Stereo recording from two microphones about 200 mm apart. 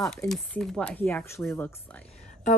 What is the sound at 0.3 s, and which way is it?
Speech, 5° left (ahead or behind).